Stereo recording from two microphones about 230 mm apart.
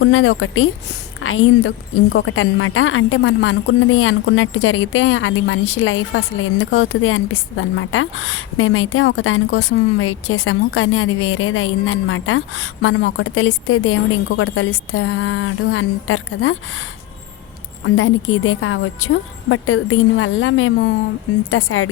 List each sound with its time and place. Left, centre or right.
0.0 s a woman's voice: left
17.8 s a woman's voice: left